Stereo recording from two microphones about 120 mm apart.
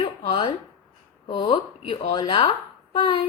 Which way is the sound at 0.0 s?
45° left (ahead or behind).